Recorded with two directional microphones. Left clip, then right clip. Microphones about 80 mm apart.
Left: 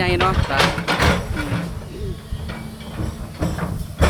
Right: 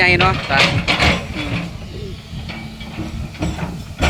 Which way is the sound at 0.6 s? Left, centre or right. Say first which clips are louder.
Right 2 dB; left.